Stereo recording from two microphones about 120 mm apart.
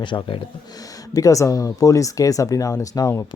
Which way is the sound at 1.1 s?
30° left (ahead or behind).